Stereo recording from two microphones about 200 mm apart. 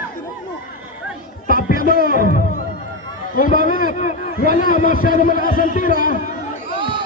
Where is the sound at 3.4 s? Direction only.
45° left (ahead or behind).